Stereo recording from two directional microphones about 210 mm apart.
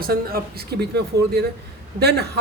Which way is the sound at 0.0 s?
45° right (ahead or behind).